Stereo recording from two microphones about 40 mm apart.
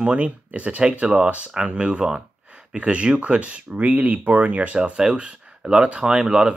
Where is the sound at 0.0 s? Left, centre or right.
Right.